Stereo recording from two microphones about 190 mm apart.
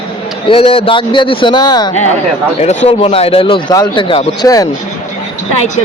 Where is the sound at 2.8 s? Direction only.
30° left (ahead or behind).